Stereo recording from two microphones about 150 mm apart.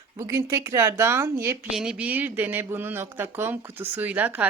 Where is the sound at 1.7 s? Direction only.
5° right (ahead or behind).